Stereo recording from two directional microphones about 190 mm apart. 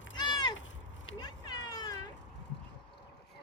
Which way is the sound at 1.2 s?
20° left (ahead or behind).